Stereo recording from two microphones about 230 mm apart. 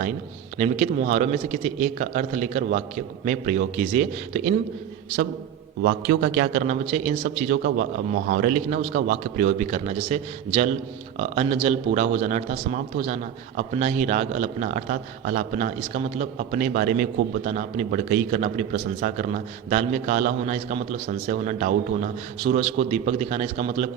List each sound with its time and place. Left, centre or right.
0.6 s a man's voice: right
5.8 s a man's voice: right